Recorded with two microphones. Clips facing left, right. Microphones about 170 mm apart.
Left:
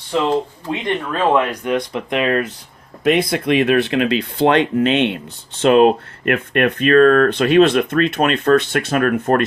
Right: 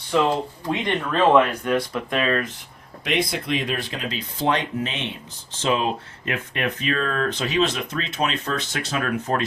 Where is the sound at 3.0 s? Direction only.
55° left (ahead or behind).